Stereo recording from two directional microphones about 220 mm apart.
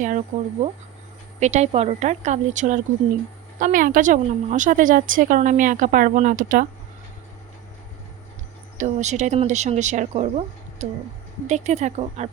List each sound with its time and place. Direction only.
0.3 s a woman's voice: 35° right (ahead or behind)
8.8 s a woman's voice: 30° right (ahead or behind)